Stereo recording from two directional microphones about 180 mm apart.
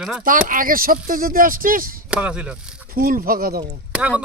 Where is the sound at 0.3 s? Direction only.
50° right (ahead or behind).